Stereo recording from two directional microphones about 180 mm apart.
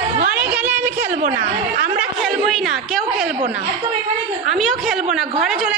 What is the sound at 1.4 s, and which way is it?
Chatter, 60° right (ahead or behind).